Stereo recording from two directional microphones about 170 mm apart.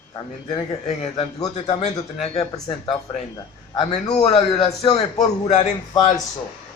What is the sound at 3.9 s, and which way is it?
A man's voice, 40° left (ahead or behind).